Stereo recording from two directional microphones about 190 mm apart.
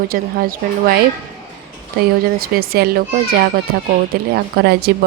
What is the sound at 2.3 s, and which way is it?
Speech, 50° right (ahead or behind).